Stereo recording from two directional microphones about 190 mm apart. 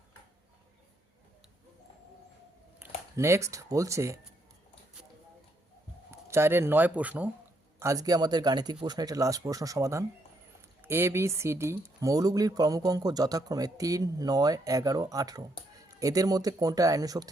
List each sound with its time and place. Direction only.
2.7 s speech: 15° right (ahead or behind)
6.1 s speech: 15° right (ahead or behind)